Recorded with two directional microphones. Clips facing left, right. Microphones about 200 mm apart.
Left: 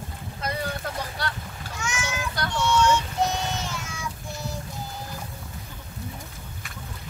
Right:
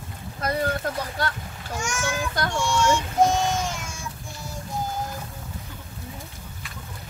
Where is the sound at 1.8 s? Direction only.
50° right (ahead or behind).